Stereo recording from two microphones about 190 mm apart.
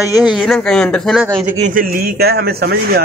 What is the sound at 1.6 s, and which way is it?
A man's voice, 45° right (ahead or behind).